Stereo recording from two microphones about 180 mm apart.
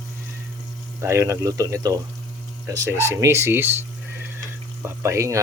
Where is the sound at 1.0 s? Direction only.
15° right (ahead or behind).